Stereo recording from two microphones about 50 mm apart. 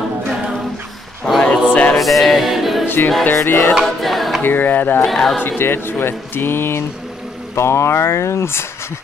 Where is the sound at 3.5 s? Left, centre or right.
Left.